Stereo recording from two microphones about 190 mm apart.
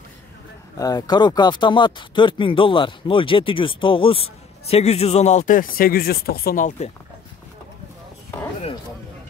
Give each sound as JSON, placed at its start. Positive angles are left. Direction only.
{"t": 0.7, "sound": "speech", "side_deg": 20}